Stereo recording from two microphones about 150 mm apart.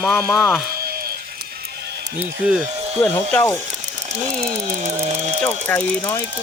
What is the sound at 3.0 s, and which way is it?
Speech, 15° left (ahead or behind).